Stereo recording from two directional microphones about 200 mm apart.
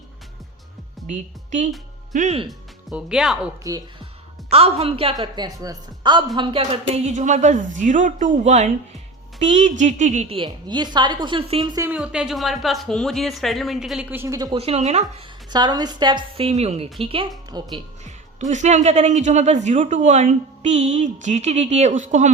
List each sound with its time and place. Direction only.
1.0 s a woman's voice: 35° right (ahead or behind)
2.5 s speech: 5° right (ahead or behind)
3.6 s speech: 15° right (ahead or behind)
4.4 s a woman's voice: 30° right (ahead or behind)
11.9 s a woman's voice: 5° right (ahead or behind)
14.6 s a woman's voice: 30° right (ahead or behind)
15.5 s a woman's voice: 20° right (ahead or behind)
18.0 s a woman's voice: 35° right (ahead or behind)